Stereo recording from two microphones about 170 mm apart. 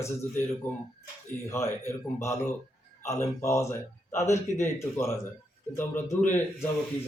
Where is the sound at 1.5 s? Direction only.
15° left (ahead or behind).